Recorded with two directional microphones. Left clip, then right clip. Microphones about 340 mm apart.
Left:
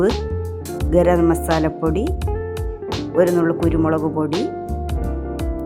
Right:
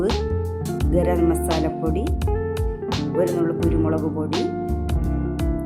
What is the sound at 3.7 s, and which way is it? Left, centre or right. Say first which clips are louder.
Speech: left 4 dB; centre.